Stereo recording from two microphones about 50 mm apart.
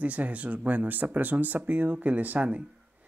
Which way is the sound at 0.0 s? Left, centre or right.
Right.